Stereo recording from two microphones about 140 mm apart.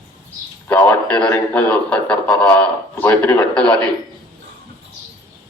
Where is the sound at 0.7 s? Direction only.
15° left (ahead or behind).